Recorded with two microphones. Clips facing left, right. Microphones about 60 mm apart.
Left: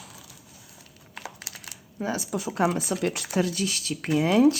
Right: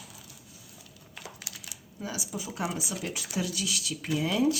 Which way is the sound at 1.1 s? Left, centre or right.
Left.